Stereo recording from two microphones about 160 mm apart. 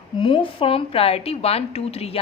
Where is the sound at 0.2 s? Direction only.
35° left (ahead or behind).